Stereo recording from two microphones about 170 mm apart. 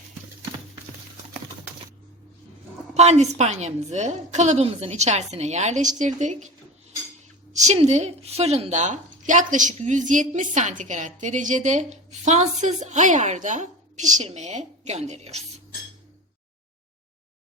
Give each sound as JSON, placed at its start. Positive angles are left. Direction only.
{"t": 2.9, "sound": "a woman's voice", "side_deg": -40}
{"t": 7.5, "sound": "speech", "side_deg": -40}